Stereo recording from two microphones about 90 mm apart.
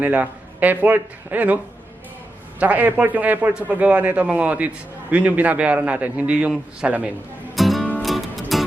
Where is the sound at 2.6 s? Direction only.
15° right (ahead or behind).